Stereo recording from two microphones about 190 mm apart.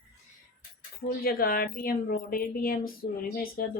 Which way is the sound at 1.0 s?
55° left (ahead or behind).